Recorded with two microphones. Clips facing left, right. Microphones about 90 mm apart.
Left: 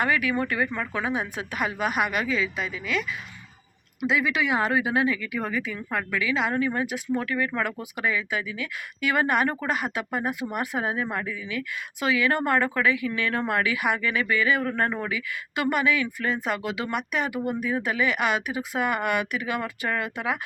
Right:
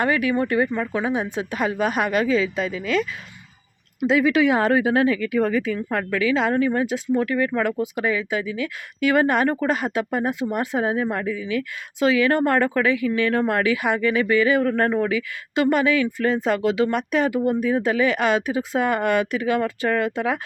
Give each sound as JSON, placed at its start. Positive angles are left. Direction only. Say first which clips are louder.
{"t": 0.0, "sound": "speech", "louder": "right 4 dB", "side_deg": -30}
{"t": 6.7, "sound": "speech", "louder": "right 5 dB", "side_deg": -25}
{"t": 14.7, "sound": "speech", "louder": "right 5 dB", "side_deg": -40}
{"t": 15.5, "sound": "speech", "louder": "right 5 dB", "side_deg": -30}